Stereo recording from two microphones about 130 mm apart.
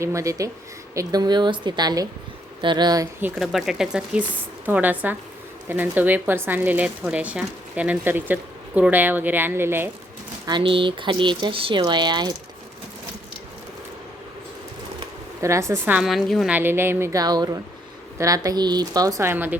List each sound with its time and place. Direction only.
0.0 s speech: 25° right (ahead or behind)
3.3 s speech: 5° right (ahead or behind)
10.4 s speech: 40° right (ahead or behind)
15.4 s speech: 25° right (ahead or behind)
16.0 s speech: centre (ahead or behind)
16.5 s speech: 15° right (ahead or behind)